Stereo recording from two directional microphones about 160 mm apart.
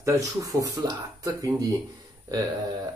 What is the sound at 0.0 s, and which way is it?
Speech, 20° right (ahead or behind).